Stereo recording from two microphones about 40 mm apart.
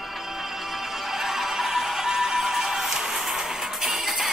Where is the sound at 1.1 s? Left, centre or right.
Centre.